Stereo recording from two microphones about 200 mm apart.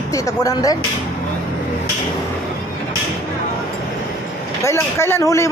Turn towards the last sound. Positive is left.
turn(degrees=15)  # may be behind; listen again after turning